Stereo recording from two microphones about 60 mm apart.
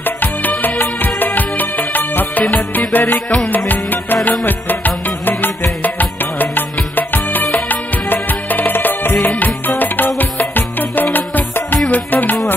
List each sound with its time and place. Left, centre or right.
0.0 s music: left
9.1 s music: centre
9.4 s music: left